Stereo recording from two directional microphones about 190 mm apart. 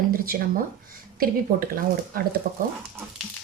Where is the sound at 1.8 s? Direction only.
50° right (ahead or behind).